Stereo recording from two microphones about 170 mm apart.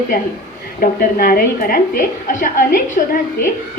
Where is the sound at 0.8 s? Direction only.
60° left (ahead or behind).